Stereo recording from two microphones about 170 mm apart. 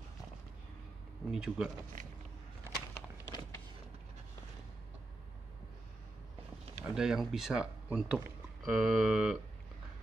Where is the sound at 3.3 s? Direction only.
25° left (ahead or behind).